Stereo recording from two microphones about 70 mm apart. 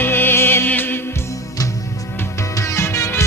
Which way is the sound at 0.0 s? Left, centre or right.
Left.